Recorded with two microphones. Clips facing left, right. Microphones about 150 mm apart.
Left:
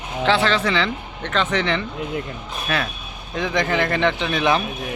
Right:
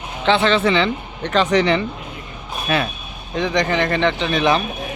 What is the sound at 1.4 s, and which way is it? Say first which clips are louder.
Speech: right 6 dB; 35° right (ahead or behind).